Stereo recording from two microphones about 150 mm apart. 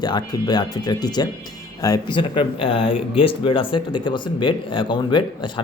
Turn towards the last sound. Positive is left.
turn(degrees=30)  # may be behind; listen again after turning